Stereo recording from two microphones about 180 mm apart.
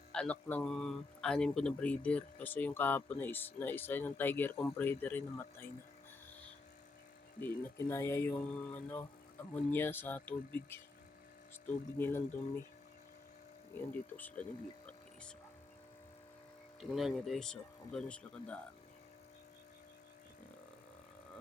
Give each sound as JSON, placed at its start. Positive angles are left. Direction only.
{"t": 0.1, "sound": "speech", "side_deg": 5}
{"t": 7.3, "sound": "speech", "side_deg": 15}
{"t": 11.9, "sound": "speech", "side_deg": 10}
{"t": 13.7, "sound": "speech", "side_deg": 10}
{"t": 16.9, "sound": "speech", "side_deg": 0}